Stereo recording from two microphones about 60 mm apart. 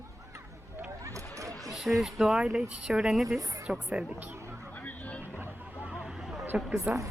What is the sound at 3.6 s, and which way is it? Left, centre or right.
Speech, centre.